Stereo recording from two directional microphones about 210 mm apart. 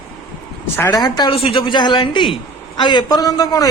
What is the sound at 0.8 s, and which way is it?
A woman's voice, 15° left (ahead or behind).